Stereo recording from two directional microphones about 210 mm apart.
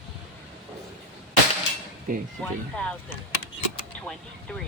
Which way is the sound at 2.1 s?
40° right (ahead or behind).